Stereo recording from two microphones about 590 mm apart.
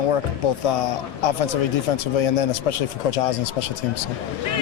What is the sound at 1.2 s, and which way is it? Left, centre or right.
Speech, left.